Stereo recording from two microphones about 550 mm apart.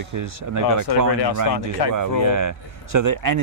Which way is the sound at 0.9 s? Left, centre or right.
Left.